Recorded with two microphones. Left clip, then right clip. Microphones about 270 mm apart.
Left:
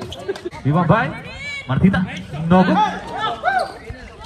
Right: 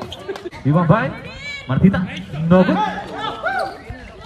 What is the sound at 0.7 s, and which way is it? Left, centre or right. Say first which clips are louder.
Speech: even; left.